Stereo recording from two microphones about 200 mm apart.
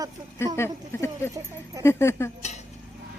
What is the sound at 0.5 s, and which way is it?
A woman's voice, 15° left (ahead or behind).